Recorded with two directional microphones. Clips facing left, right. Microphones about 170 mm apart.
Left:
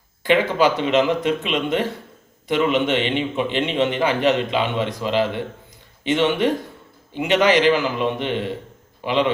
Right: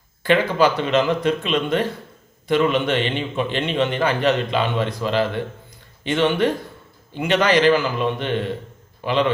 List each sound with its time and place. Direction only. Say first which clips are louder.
0.2 s a man's voice: even; 15° left (ahead or behind)